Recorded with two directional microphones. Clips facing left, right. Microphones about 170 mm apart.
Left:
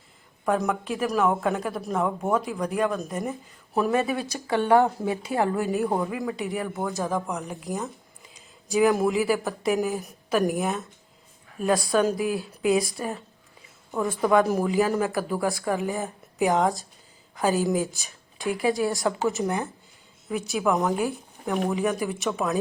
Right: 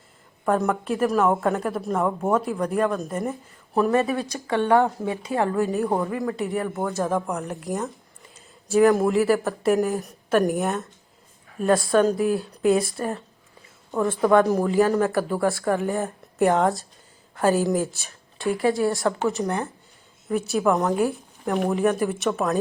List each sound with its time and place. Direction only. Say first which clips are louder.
0.4 s speech: right 3 dB; centre (ahead or behind)
4.1 s speech: right 1 dB; 10° left (ahead or behind)
6.3 s speech: right 3 dB; centre (ahead or behind)
18.6 s speech: right 2 dB; 20° left (ahead or behind)
19.2 s speech: right 1 dB; centre (ahead or behind)